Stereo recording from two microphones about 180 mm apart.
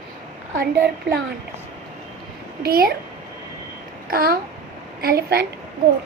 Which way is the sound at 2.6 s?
55° right (ahead or behind).